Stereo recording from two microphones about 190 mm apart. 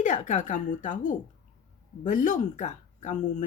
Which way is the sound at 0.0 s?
40° left (ahead or behind).